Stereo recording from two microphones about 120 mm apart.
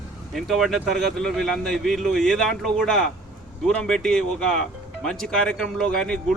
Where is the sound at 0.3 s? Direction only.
Centre (ahead or behind).